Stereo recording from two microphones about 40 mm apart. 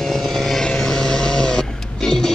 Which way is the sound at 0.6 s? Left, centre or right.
Centre.